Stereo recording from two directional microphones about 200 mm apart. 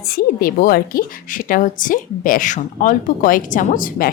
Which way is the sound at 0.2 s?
45° left (ahead or behind).